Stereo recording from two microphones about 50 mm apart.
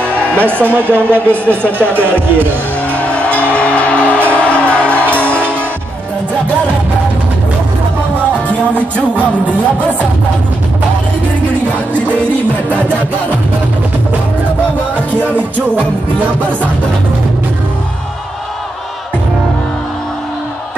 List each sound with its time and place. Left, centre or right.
0.0 s music: left
0.4 s a woman's voice: right
1.6 s speech: left
2.0 s a woman's voice: right
2.9 s music: left
15.0 s music: right